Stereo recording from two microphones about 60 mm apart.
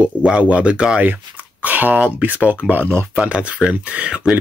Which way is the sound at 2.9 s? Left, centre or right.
Right.